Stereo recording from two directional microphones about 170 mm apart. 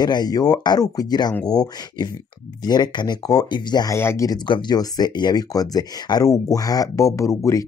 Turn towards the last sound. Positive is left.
turn(degrees=20)  # may be behind; listen again after turning